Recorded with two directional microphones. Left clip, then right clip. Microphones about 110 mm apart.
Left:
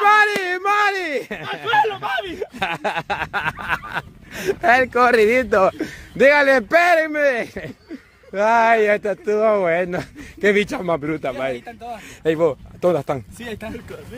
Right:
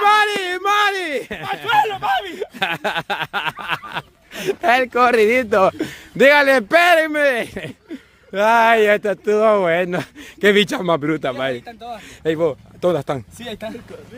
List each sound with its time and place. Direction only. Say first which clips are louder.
0.0 s a sound: even; 15° right (ahead or behind)
2.3 s speech: right 2 dB; 25° right (ahead or behind)
8.8 s speech: right 2 dB; 45° right (ahead or behind)
11.5 s speech: right 1 dB; 5° right (ahead or behind)
12.8 s speech: even; 20° right (ahead or behind)